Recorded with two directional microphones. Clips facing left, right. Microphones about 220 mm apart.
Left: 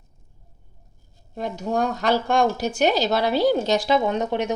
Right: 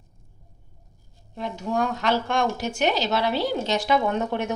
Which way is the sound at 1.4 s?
40° left (ahead or behind).